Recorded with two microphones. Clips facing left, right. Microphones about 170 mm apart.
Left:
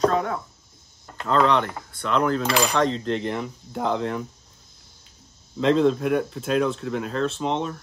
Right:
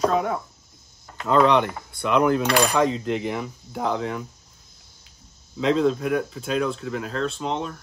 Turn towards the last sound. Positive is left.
turn(degrees=0)  # may be behind; listen again after turning